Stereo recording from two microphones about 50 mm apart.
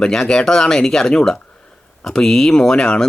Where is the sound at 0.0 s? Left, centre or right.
Centre.